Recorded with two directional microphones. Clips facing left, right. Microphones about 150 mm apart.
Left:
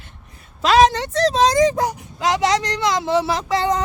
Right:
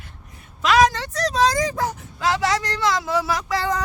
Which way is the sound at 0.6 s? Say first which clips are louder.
Left 3 dB; 30° left (ahead or behind).